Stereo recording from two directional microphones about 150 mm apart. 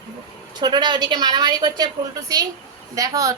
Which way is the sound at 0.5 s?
30° right (ahead or behind).